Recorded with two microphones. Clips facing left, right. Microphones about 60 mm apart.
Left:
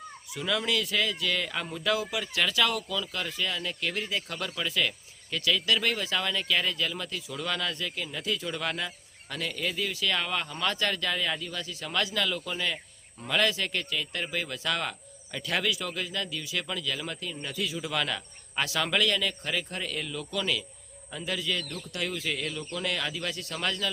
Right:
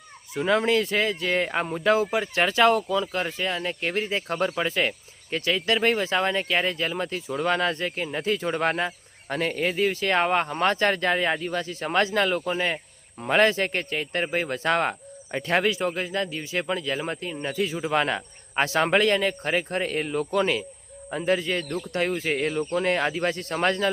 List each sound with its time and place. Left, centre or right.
0.3 s speech: right